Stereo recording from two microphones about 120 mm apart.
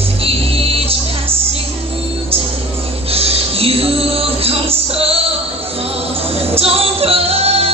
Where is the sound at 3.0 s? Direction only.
55° right (ahead or behind).